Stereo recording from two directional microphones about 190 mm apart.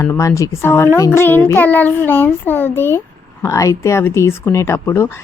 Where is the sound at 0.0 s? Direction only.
15° left (ahead or behind).